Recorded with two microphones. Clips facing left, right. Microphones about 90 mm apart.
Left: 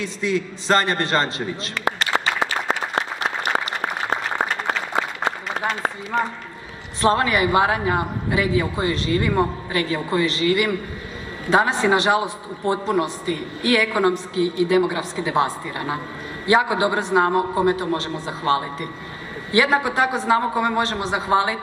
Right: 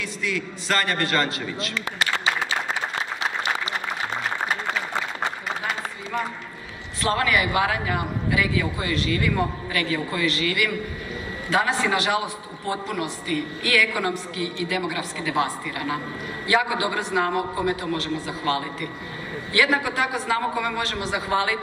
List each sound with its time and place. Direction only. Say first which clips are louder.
0.0 s a man's voice: left 5 dB; 30° left (ahead or behind)
2.4 s applause: left 3 dB; 55° left (ahead or behind)
7.0 s a man's voice: left 4 dB; 30° left (ahead or behind)